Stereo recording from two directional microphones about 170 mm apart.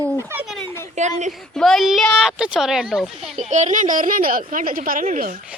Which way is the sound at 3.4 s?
45° right (ahead or behind).